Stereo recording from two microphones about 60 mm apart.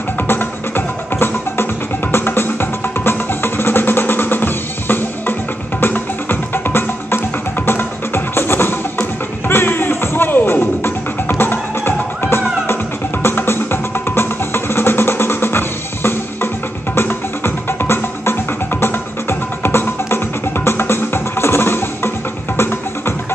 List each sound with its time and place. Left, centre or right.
0.3 s music: left